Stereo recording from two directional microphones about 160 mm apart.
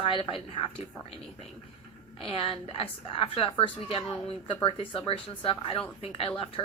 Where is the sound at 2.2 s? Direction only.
35° left (ahead or behind).